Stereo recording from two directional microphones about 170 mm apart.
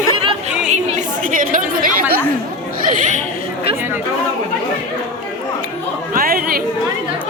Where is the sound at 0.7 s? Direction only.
50° right (ahead or behind).